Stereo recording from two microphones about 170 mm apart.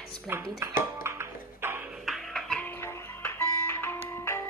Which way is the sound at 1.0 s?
15° right (ahead or behind).